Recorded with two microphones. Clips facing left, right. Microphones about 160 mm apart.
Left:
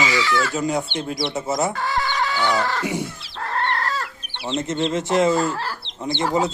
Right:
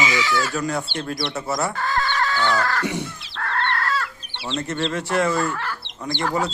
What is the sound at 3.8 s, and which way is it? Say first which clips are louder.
Chicken: right 1 dB; 35° left (ahead or behind).